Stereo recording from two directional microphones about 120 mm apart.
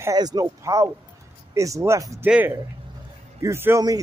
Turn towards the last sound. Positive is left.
turn(degrees=-20)  # may be behind; listen again after turning